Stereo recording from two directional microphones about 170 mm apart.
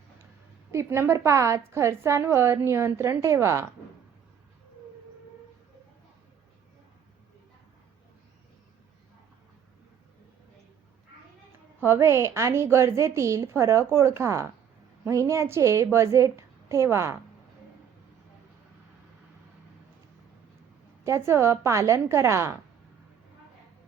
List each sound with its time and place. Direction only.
0.7 s a woman's voice: 15° right (ahead or behind)
11.8 s a woman's voice: 15° right (ahead or behind)
21.0 s a woman's voice: 15° right (ahead or behind)